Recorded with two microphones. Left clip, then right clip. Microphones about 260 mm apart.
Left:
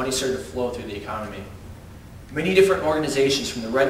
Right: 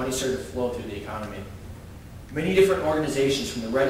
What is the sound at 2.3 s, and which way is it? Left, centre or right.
Speech, centre.